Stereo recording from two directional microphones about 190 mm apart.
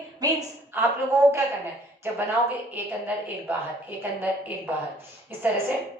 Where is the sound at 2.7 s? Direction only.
10° right (ahead or behind).